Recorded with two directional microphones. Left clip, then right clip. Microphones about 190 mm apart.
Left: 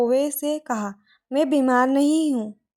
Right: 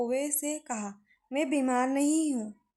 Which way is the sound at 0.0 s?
30° left (ahead or behind).